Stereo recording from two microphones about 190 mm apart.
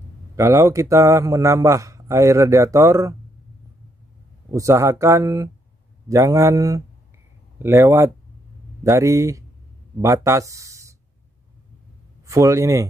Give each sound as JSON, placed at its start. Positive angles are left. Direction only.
{"t": 0.4, "sound": "a man's voice", "side_deg": -15}
{"t": 4.5, "sound": "a man's voice", "side_deg": -15}
{"t": 12.3, "sound": "a man's voice", "side_deg": -15}